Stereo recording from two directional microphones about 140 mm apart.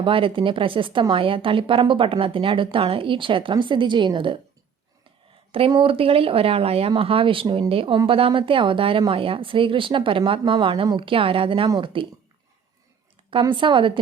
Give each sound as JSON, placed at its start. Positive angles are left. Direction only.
{"t": 0.0, "sound": "speech", "side_deg": -40}
{"t": 5.5, "sound": "speech", "side_deg": -40}
{"t": 13.4, "sound": "speech", "side_deg": -35}